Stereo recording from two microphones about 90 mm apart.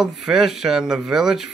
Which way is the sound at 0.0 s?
5° right (ahead or behind).